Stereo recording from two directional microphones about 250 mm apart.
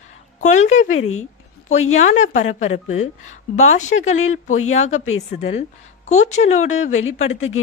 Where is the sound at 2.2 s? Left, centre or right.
Left.